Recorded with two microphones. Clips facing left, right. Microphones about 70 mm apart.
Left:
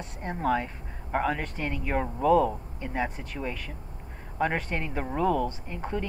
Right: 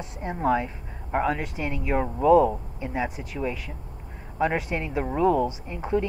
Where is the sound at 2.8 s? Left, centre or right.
Centre.